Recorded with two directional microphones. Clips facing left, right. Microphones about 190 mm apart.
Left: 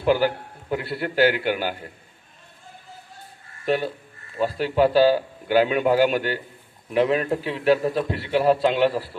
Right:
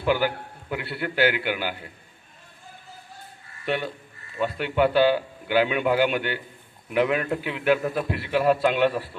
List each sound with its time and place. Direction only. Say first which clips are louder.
0.0 s a man's voice: left 3 dB; 40° left (ahead or behind)
3.7 s a man's voice: left 4 dB; 35° left (ahead or behind)